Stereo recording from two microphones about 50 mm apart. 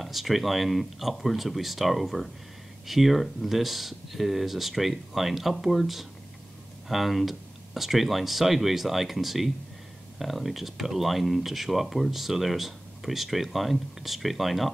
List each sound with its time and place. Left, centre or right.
0.0 s speech: centre